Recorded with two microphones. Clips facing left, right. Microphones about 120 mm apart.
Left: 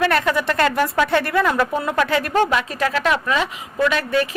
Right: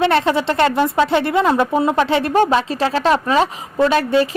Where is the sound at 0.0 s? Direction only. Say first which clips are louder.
Right 3 dB; 30° right (ahead or behind).